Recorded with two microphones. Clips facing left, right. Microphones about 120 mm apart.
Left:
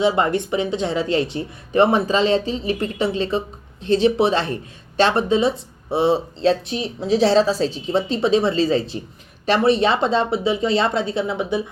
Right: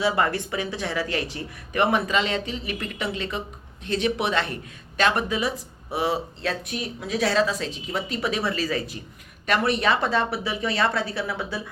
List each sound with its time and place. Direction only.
0.0 s speech: 25° left (ahead or behind)